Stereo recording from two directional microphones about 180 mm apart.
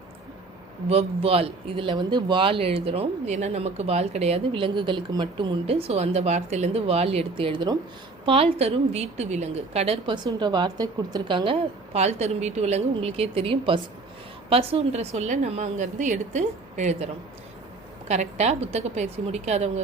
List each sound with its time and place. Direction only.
0.9 s a woman's voice: 35° right (ahead or behind)
11.9 s speech: 40° right (ahead or behind)
18.1 s speech: 40° right (ahead or behind)